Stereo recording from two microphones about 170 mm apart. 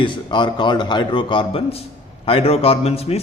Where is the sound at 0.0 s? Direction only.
30° left (ahead or behind).